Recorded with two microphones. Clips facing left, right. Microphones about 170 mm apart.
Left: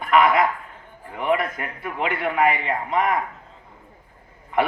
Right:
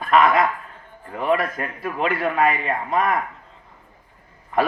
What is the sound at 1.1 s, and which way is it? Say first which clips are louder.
Speech: right 1 dB; 35° right (ahead or behind).